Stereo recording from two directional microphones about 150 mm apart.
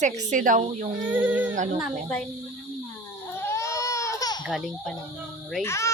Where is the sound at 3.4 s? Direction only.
20° left (ahead or behind).